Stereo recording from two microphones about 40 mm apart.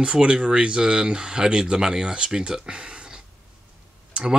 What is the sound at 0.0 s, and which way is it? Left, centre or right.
Speech, right.